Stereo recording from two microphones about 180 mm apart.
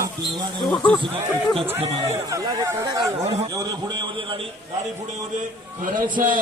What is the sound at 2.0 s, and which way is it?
A man's voice, 20° right (ahead or behind).